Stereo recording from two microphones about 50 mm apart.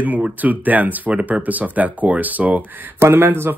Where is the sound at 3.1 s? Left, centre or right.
Right.